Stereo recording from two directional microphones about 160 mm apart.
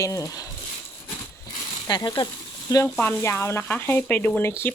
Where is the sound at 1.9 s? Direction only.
25° left (ahead or behind).